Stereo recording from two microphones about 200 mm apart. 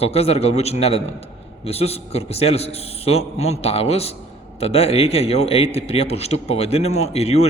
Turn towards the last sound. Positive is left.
turn(degrees=30)  # may be behind; listen again after turning